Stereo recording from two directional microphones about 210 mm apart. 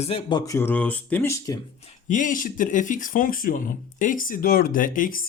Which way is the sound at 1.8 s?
35° left (ahead or behind).